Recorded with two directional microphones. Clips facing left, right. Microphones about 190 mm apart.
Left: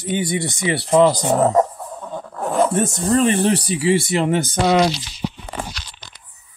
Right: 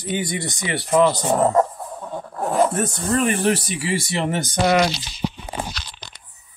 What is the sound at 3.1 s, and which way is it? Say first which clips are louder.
Speech: left 3 dB; 30° left (ahead or behind).